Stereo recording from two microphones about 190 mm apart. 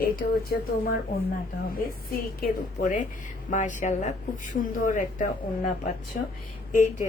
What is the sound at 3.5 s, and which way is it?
Speech, 40° left (ahead or behind).